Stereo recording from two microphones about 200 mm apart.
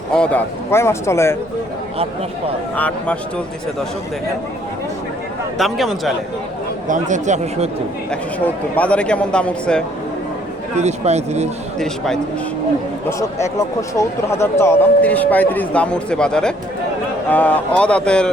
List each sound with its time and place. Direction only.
0.2 s a man's voice: 10° left (ahead or behind)
2.7 s a man's voice: 5° left (ahead or behind)
5.5 s a man's voice: centre (ahead or behind)
6.8 s speech: 40° right (ahead or behind)
8.1 s a man's voice: 5° left (ahead or behind)
10.8 s speech: 35° right (ahead or behind)
11.8 s a man's voice: centre (ahead or behind)
13.1 s a man's voice: 15° left (ahead or behind)